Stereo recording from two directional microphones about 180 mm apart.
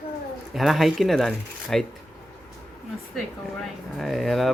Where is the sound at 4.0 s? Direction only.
Centre (ahead or behind).